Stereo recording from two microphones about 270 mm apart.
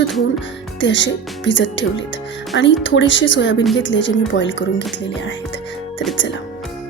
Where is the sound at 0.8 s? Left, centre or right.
Left.